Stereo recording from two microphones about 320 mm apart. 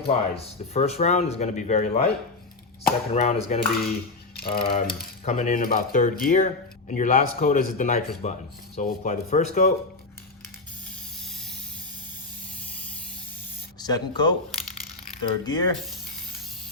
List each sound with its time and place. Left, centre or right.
0.1 s speech: centre
13.7 s speech: centre